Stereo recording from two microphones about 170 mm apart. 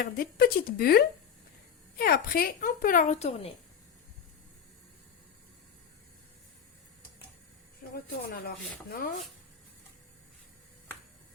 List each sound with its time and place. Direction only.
0.0 s speech: 65° left (ahead or behind); by 3.5 s 40° left (ahead or behind)
8.3 s speech: 65° left (ahead or behind)